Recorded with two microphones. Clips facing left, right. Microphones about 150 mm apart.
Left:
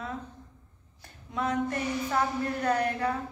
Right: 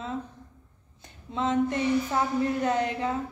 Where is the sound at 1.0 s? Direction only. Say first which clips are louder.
Right 2 dB; 25° right (ahead or behind).